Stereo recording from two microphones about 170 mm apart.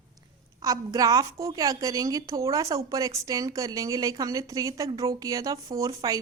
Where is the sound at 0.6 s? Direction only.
20° right (ahead or behind).